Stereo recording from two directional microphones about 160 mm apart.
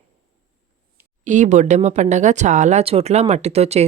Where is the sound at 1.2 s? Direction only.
50° right (ahead or behind).